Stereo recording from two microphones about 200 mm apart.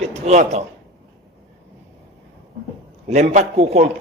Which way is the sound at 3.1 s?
35° right (ahead or behind).